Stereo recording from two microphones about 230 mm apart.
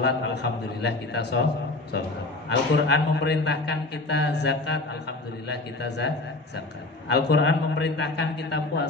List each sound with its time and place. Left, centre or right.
0.0 s a man's voice: left
2.5 s a man's voice: left